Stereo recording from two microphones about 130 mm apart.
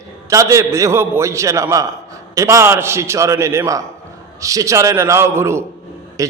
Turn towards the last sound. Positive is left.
turn(degrees=-25)  # may be behind; listen again after turning